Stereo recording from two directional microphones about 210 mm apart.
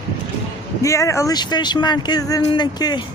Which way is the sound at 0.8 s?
15° left (ahead or behind).